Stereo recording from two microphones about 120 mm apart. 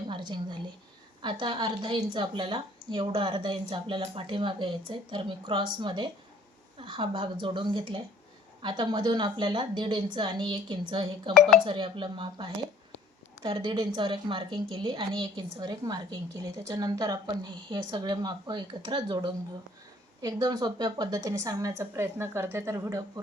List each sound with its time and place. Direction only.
0.1 s a woman's voice: 40° right (ahead or behind)